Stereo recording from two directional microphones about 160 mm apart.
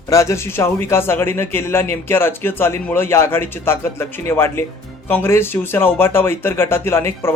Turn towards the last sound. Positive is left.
turn(degrees=15)  # may be behind; listen again after turning